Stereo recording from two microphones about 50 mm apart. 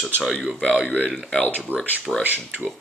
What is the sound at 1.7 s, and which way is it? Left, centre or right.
Speech, right.